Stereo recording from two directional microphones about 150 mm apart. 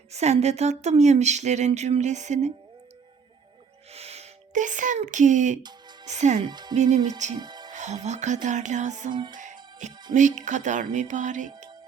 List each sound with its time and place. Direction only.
0.1 s a sound: 45° right (ahead or behind)
3.9 s speech: 45° right (ahead or behind)
6.1 s a sound: 50° right (ahead or behind)
6.4 s speech: 30° right (ahead or behind)
7.3 s music: 30° right (ahead or behind)
7.7 s music: 55° right (ahead or behind)
8.0 s a sound: 50° right (ahead or behind)
9.1 s speech: 30° right (ahead or behind)
9.4 s music: 55° right (ahead or behind)
10.2 s speech: 55° right (ahead or behind)